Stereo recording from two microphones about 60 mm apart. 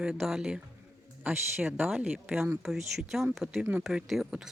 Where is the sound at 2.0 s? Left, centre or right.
Right.